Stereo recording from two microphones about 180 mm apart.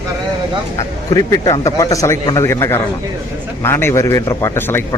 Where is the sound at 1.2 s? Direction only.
20° left (ahead or behind).